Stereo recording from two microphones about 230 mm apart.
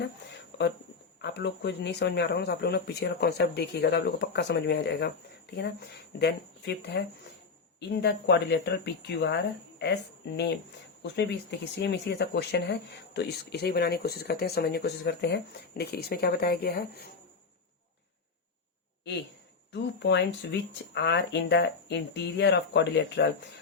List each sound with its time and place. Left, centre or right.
0.5 s a sound: left
1.2 s speech: left
19.7 s speech: left